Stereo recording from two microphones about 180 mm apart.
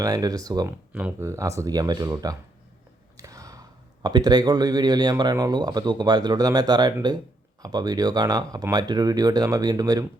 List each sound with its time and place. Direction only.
0.0 s speech: 20° right (ahead or behind)